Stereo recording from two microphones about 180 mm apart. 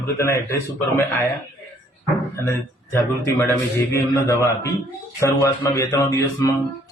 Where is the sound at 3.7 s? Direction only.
15° left (ahead or behind).